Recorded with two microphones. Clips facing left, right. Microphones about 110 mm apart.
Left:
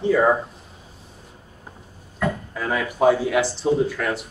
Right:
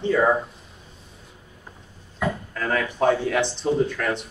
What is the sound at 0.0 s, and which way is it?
Speech, 5° left (ahead or behind).